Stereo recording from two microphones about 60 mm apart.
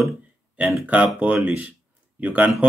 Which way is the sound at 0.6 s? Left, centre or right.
Right.